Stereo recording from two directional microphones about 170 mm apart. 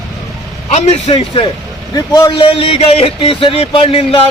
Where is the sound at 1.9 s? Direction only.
25° left (ahead or behind).